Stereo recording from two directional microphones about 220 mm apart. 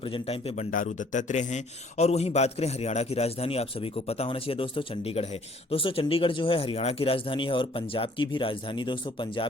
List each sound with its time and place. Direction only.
0.0 s speech: 25° left (ahead or behind)